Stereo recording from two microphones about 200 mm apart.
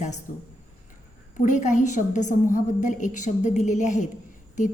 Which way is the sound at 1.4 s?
40° left (ahead or behind).